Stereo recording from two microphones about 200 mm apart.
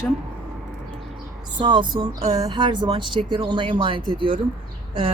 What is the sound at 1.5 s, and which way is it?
A woman's voice, 20° right (ahead or behind).